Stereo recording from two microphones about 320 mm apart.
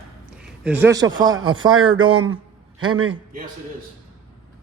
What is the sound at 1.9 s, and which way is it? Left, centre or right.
Speech, right.